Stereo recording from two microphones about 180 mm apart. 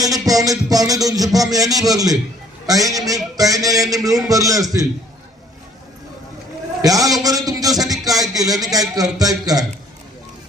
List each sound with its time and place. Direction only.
0.0 s a man's voice: 20° right (ahead or behind)
6.8 s a man's voice: 20° right (ahead or behind)